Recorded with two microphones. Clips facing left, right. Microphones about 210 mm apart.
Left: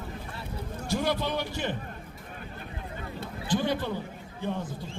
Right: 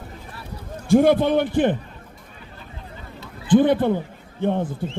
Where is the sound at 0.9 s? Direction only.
55° right (ahead or behind).